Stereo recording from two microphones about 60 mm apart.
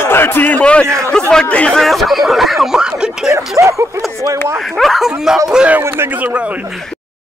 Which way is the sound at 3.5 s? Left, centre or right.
Right.